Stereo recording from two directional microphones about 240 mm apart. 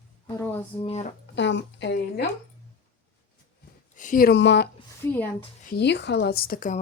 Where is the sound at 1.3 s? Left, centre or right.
Left.